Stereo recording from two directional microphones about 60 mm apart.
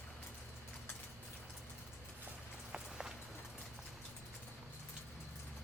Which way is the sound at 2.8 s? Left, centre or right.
Centre.